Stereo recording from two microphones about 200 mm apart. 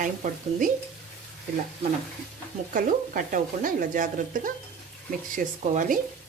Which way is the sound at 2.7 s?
40° right (ahead or behind).